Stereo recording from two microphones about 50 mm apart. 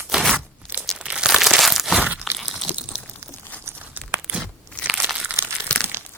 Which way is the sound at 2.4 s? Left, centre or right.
Centre.